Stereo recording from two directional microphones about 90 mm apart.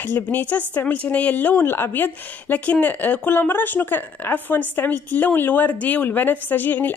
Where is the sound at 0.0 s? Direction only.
20° left (ahead or behind).